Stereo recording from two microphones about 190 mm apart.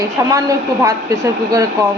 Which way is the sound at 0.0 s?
15° right (ahead or behind).